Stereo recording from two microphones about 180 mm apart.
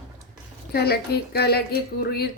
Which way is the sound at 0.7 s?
60° left (ahead or behind).